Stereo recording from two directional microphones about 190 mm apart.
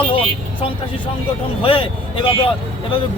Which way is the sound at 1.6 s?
30° left (ahead or behind).